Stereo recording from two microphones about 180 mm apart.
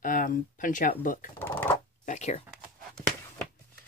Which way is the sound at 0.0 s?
50° left (ahead or behind).